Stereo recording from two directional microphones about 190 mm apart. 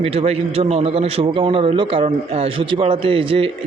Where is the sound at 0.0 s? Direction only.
30° right (ahead or behind).